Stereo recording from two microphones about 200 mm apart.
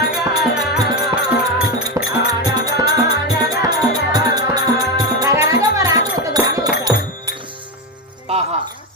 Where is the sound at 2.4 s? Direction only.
20° right (ahead or behind).